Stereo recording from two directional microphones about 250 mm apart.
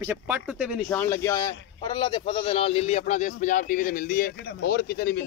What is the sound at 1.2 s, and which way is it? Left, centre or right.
A man's voice, centre.